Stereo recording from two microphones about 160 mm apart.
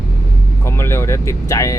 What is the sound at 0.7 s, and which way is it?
Speech, 15° left (ahead or behind).